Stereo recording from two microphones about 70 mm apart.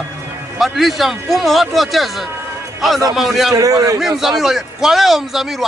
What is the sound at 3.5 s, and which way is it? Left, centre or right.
Speech, right.